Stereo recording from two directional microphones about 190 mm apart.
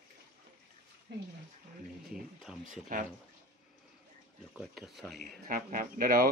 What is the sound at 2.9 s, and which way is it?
Speech, 45° right (ahead or behind).